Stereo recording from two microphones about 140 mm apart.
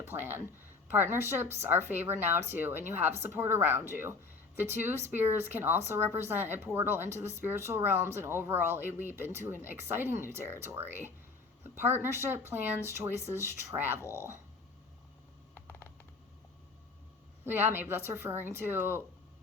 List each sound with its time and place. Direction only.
0.0 s speech: 15° right (ahead or behind)
17.4 s speech: 15° right (ahead or behind)